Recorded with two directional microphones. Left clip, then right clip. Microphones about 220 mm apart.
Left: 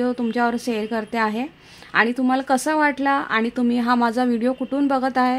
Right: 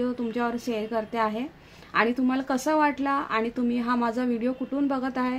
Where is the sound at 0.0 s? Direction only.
50° left (ahead or behind).